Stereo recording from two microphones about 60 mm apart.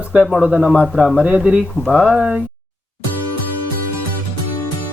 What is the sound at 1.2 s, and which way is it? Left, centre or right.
Speech, centre.